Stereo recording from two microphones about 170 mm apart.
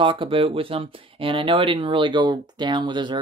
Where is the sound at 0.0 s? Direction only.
30° right (ahead or behind).